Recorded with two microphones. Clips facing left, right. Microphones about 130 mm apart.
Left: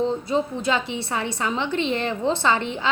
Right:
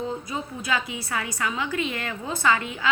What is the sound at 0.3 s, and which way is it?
Speech, 30° left (ahead or behind).